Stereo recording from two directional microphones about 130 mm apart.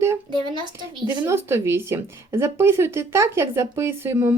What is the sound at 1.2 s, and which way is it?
Speech, 20° right (ahead or behind).